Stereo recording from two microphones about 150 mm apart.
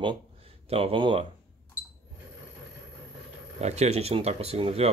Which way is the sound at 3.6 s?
45° right (ahead or behind).